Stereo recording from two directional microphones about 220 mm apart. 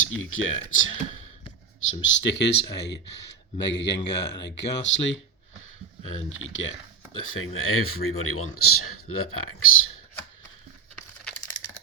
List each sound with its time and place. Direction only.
0.0 s speech: 65° left (ahead or behind)
1.9 s speech: 60° left (ahead or behind)
6.2 s speech: 65° left (ahead or behind); by 8.9 s 80° left
9.3 s speech: 70° left (ahead or behind)